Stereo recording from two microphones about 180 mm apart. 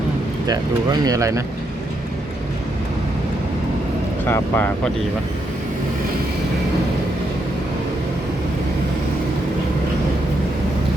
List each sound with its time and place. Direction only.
0.4 s speech: 20° right (ahead or behind)
4.3 s speech: 10° left (ahead or behind)